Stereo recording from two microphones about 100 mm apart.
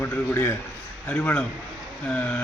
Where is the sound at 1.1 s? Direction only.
15° left (ahead or behind).